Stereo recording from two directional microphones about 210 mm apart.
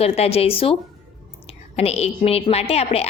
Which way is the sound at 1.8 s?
30° left (ahead or behind).